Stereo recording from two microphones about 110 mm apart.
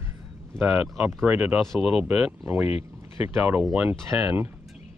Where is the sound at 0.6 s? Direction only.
5° right (ahead or behind).